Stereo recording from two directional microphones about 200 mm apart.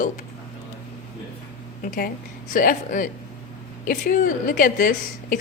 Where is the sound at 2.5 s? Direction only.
40° left (ahead or behind).